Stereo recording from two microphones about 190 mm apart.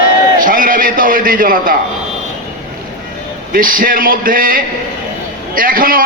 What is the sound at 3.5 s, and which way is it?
A man's voice, 45° right (ahead or behind).